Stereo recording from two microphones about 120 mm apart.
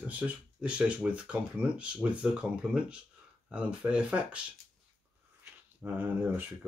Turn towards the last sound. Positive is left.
turn(degrees=-15)  # may be behind; listen again after turning